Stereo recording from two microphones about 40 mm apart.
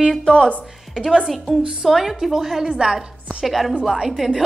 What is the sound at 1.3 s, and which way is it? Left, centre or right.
A woman's voice, centre.